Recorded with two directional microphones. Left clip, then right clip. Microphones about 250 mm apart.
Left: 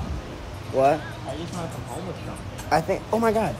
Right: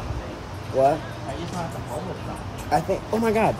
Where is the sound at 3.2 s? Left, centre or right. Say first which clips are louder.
Right 1 dB; centre.